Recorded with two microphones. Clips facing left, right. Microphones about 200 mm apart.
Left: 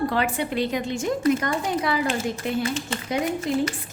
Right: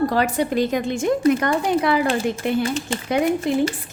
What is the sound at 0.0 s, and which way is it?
A woman's voice, 40° right (ahead or behind).